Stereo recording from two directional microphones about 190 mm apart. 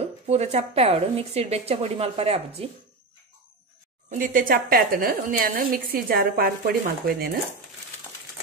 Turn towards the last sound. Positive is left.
turn(degrees=-55)  # may be behind; listen again after turning